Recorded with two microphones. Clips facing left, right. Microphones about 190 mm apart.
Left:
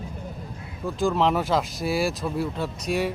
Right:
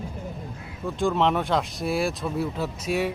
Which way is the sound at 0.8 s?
Centre (ahead or behind).